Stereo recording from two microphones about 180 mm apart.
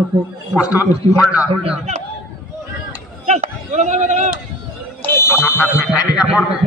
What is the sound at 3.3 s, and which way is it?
Speech, 40° right (ahead or behind).